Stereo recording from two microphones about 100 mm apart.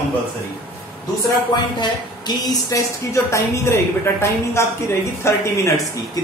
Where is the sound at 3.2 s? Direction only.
25° left (ahead or behind).